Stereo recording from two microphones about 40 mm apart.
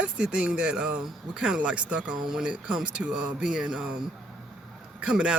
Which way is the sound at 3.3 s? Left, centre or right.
Right.